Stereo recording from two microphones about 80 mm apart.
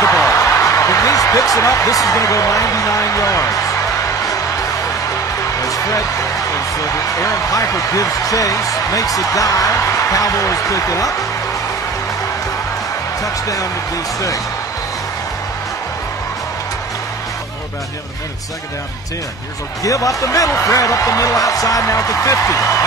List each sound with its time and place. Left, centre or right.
0.0 s a sound: left
7.2 s speech: left
13.2 s speech: left
19.8 s speech: left